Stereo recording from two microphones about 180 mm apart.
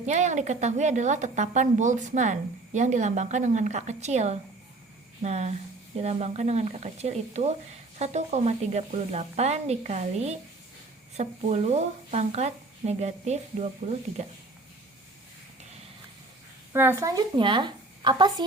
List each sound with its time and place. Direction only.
0.0 s a woman's voice: 40° right (ahead or behind)
16.7 s a woman's voice: 15° right (ahead or behind)